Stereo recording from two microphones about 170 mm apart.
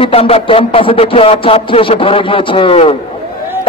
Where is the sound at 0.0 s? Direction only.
35° left (ahead or behind).